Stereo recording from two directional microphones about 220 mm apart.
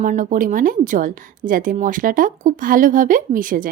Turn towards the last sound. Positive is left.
turn(degrees=-35)  # may be behind; listen again after turning